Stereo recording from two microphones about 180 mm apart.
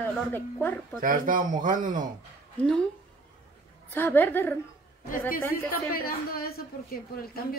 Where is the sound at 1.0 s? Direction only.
50° right (ahead or behind).